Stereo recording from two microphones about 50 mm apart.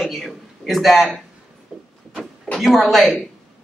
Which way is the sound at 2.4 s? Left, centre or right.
Centre.